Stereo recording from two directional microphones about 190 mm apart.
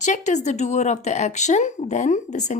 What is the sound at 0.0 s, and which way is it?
Speech, 40° left (ahead or behind).